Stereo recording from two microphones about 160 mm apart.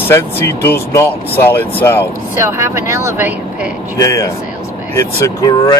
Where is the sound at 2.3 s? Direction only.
15° right (ahead or behind).